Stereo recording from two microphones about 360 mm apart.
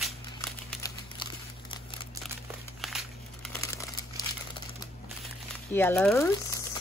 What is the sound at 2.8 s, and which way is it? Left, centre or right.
Crumpling, centre.